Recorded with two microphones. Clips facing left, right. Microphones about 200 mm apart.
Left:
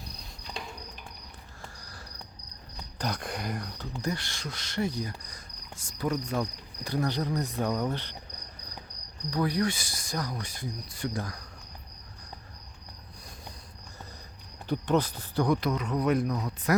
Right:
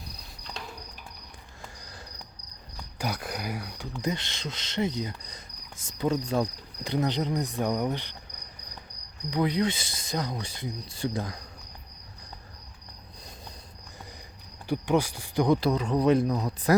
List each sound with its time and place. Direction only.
3.0 s speech: 5° right (ahead or behind)
4.0 s speech: 20° right (ahead or behind)
9.3 s speech: 20° right (ahead or behind)
14.7 s speech: 10° right (ahead or behind)
15.4 s speech: 30° right (ahead or behind)